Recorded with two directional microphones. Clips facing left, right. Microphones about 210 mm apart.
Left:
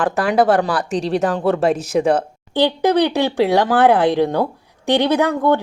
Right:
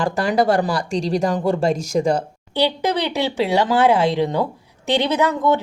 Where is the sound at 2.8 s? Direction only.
15° left (ahead or behind).